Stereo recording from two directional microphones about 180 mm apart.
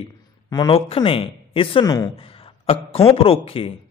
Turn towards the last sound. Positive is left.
turn(degrees=30)  # may be behind; listen again after turning